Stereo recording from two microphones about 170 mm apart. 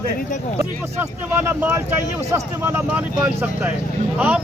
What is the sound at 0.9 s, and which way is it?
Speech, 10° right (ahead or behind).